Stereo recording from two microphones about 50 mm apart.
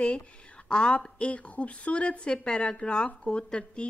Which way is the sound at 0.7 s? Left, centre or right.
Left.